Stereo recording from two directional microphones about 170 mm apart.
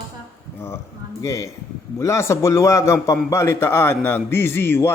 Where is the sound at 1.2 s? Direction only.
20° left (ahead or behind).